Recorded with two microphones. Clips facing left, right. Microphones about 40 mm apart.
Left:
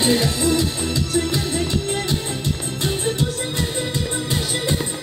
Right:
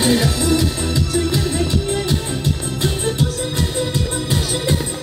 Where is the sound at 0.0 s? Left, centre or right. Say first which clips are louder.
Right 2 dB; right.